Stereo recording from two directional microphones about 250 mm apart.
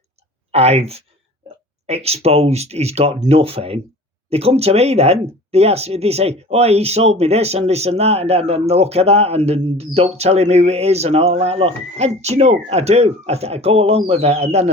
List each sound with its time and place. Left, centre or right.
0.5 s speech: right